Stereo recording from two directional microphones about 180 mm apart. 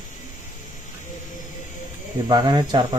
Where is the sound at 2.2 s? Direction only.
25° right (ahead or behind).